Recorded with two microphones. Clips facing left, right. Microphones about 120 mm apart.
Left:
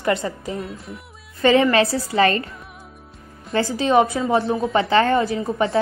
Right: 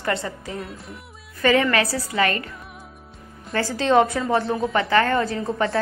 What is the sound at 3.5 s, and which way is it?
Speech, 15° left (ahead or behind).